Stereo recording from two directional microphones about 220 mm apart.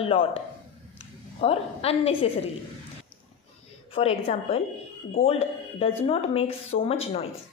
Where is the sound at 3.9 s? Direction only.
25° left (ahead or behind).